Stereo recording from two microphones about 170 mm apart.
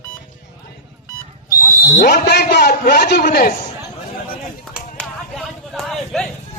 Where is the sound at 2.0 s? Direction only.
60° left (ahead or behind).